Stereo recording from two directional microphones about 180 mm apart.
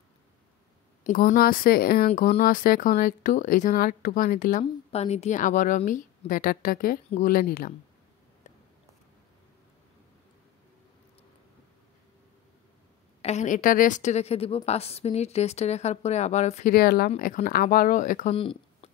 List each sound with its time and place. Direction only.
1.0 s speech: 50° left (ahead or behind)
2.0 s speech: 40° left (ahead or behind)
13.2 s a woman's voice: 40° left (ahead or behind)